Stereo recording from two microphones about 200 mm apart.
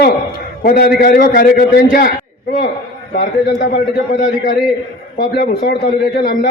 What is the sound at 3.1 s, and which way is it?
Speech, 45° left (ahead or behind).